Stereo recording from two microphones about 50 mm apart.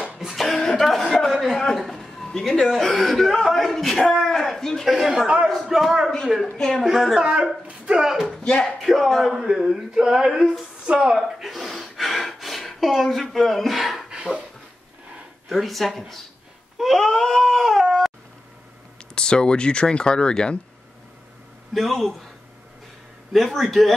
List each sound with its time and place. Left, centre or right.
0.2 s cough: centre
0.5 s a sound: centre
1.2 s a man's voice: centre
4.8 s a man's voice: centre
7.2 s speech: centre
8.4 s speech: centre
8.8 s a man's voice: centre
11.1 s gasp: centre
14.1 s a sound: centre
15.4 s a man's voice: centre
18.9 s speech: centre
21.7 s a man's voice: centre
23.3 s a man's voice: centre